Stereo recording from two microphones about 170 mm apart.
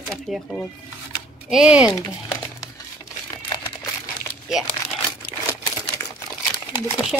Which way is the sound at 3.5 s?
20° left (ahead or behind).